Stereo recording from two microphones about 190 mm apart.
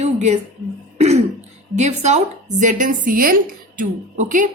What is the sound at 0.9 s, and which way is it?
Throat clearing, 35° right (ahead or behind).